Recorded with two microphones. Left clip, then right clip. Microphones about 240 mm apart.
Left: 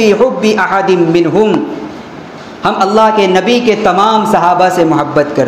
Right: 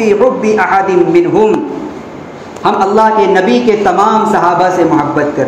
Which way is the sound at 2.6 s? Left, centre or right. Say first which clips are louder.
Even; left.